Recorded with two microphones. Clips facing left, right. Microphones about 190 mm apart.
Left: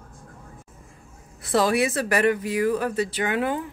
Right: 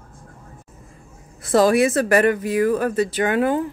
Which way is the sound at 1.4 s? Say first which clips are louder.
Right 6 dB; 45° right (ahead or behind).